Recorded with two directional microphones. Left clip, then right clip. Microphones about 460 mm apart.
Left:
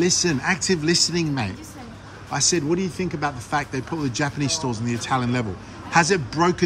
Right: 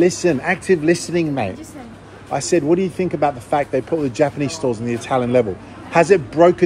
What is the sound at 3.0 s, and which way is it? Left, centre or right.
Speech, centre.